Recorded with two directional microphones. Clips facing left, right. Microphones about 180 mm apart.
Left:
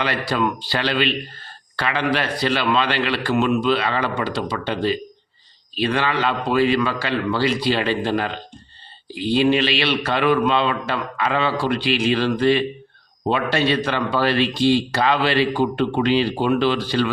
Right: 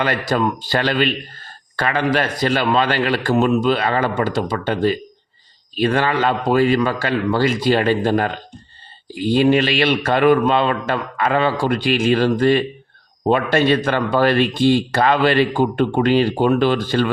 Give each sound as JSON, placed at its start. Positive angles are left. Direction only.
{"t": 0.0, "sound": "speech", "side_deg": -45}